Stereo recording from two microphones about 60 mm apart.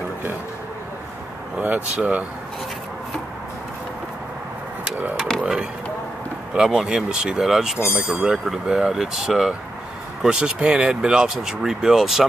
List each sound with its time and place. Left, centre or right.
2.0 s speech: right
5.1 s a sound: centre
6.5 s speech: centre